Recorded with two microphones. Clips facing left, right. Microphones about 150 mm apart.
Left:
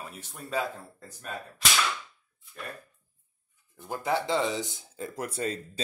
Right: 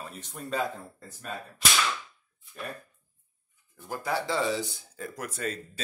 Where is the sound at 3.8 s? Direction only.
20° left (ahead or behind).